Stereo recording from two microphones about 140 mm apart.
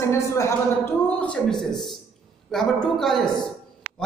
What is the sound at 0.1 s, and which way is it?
Speech, 20° left (ahead or behind).